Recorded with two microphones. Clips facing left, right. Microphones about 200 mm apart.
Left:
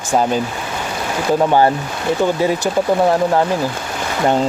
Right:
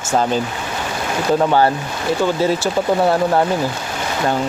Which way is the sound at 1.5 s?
15° left (ahead or behind).